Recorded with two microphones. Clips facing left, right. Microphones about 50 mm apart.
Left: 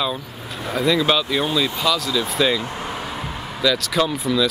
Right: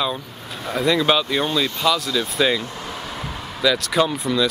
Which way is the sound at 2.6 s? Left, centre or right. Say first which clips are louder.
Left 3 dB; left.